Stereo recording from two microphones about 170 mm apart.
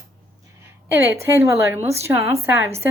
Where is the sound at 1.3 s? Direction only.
15° right (ahead or behind).